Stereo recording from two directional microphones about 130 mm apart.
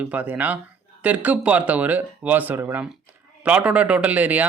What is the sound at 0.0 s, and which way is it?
Speech, 10° right (ahead or behind).